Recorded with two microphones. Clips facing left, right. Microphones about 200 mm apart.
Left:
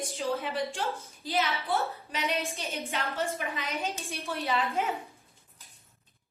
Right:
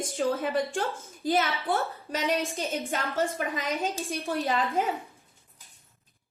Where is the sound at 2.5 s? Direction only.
50° right (ahead or behind).